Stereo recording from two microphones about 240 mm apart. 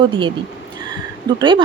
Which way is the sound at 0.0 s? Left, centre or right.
Right.